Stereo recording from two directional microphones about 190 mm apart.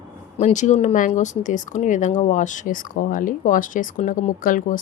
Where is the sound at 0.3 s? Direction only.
40° left (ahead or behind).